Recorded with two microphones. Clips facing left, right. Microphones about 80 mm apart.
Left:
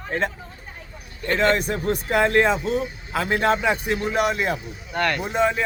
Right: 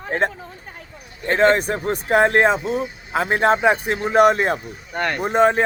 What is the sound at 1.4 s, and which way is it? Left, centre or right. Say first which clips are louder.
Speech: right 5 dB; right.